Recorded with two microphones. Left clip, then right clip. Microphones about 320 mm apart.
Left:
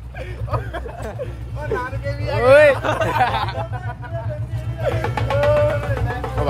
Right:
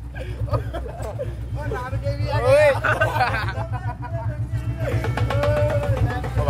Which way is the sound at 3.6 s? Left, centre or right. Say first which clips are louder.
Left 2 dB; left.